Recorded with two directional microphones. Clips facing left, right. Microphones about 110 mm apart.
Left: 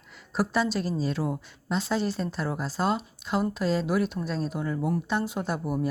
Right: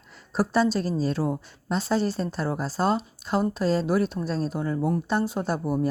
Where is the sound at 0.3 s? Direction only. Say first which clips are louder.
Right 3 dB; 35° right (ahead or behind).